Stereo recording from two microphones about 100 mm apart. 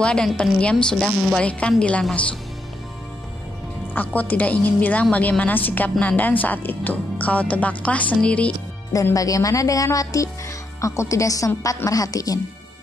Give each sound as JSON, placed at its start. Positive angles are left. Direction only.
{"t": 0.0, "sound": "a woman's voice", "side_deg": 10}
{"t": 3.9, "sound": "a woman's voice", "side_deg": 15}
{"t": 9.1, "sound": "speech", "side_deg": 35}